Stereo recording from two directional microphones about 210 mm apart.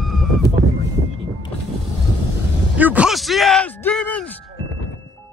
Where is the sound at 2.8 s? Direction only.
5° right (ahead or behind).